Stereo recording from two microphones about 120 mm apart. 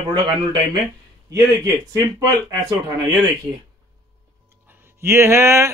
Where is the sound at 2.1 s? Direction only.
25° right (ahead or behind).